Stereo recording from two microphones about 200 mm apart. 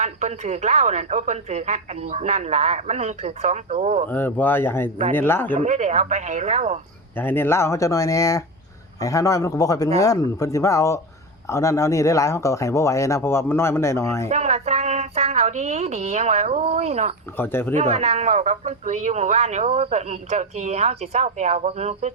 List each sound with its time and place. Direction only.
0.0 s a man's voice: 35° right (ahead or behind)
4.1 s speech: 10° left (ahead or behind)
5.5 s a man's voice: 35° right (ahead or behind)
7.2 s speech: 10° left (ahead or behind)
14.3 s a woman's voice: 35° right (ahead or behind)
17.3 s speech: 10° left (ahead or behind)
17.7 s a man's voice: 30° right (ahead or behind)